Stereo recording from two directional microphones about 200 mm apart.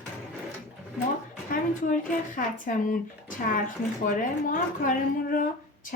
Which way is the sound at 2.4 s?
40° left (ahead or behind).